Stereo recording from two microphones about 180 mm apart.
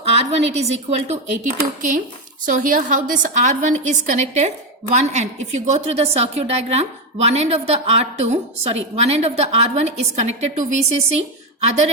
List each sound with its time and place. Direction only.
0.0 s a woman's voice: 35° right (ahead or behind)
2.5 s a woman's voice: 45° right (ahead or behind)